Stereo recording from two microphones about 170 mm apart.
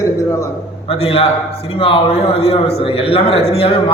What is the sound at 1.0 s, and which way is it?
Speech, 35° left (ahead or behind).